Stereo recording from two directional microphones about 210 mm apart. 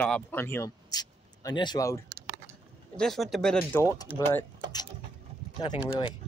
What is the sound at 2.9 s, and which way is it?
Speech, centre (ahead or behind).